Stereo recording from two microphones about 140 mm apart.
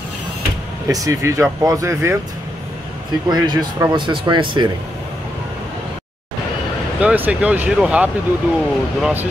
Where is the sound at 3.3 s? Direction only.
30° right (ahead or behind).